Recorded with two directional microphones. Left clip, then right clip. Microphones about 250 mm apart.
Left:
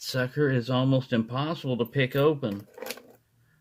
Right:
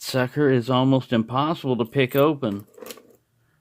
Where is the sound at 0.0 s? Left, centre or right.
Right.